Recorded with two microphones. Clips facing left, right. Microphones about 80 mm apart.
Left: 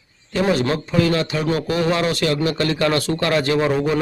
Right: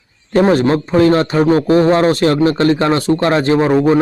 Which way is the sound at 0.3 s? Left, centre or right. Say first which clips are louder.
Right 7 dB; right.